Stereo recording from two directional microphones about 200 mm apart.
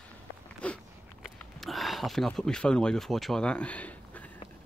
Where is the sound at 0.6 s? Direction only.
5° left (ahead or behind).